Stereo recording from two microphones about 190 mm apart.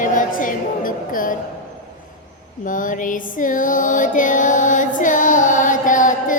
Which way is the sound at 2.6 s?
45° left (ahead or behind).